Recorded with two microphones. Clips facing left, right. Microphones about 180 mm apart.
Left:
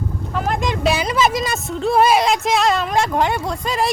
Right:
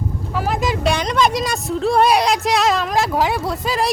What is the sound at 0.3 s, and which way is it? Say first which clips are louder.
Speech: right 1 dB; 5° right (ahead or behind).